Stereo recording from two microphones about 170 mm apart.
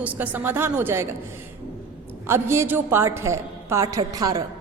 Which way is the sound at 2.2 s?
15° right (ahead or behind).